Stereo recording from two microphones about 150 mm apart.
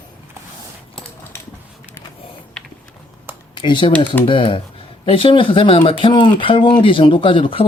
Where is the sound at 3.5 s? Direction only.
30° left (ahead or behind).